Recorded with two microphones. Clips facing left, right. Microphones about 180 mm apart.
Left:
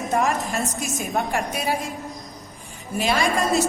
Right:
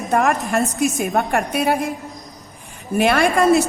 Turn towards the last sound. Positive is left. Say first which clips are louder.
# right 6 dB
turn(degrees=-60)  # may be behind; listen again after turning